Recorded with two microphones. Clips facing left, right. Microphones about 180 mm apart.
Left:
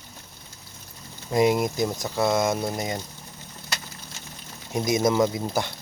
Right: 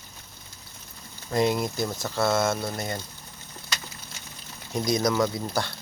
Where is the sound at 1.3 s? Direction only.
15° left (ahead or behind).